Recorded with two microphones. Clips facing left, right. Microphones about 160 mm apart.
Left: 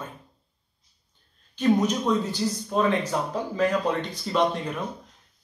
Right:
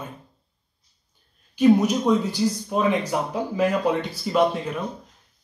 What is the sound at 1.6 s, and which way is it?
Speech, 10° right (ahead or behind).